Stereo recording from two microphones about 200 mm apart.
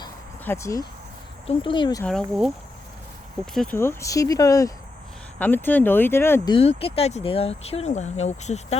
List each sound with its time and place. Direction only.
0.4 s speech: 15° left (ahead or behind)
2.0 s speech: centre (ahead or behind)
3.8 s speech: 15° left (ahead or behind)
6.5 s speech: 30° left (ahead or behind)